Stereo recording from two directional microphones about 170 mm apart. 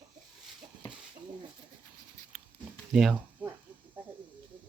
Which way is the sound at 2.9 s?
5° right (ahead or behind).